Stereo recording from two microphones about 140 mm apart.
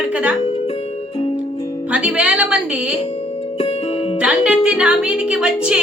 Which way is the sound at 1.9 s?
10° right (ahead or behind).